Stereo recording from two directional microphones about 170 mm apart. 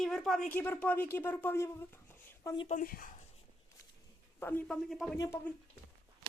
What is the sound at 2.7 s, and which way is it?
Speech, 55° left (ahead or behind).